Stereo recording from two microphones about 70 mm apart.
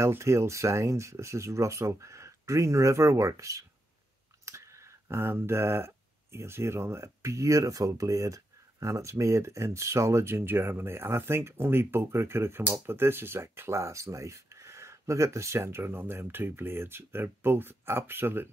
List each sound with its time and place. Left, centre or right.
0.0 s speech: right